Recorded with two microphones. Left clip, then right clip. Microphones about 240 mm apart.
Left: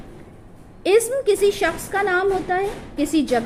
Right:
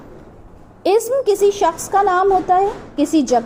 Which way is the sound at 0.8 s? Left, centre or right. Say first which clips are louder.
Right 2 dB; centre.